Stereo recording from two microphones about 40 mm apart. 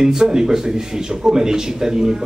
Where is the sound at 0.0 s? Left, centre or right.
Centre.